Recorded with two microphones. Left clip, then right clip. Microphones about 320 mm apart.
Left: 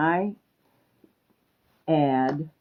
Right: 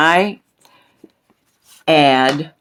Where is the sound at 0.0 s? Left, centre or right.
Right.